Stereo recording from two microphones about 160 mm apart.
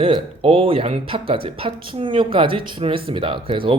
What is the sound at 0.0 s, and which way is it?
Speech, 35° right (ahead or behind).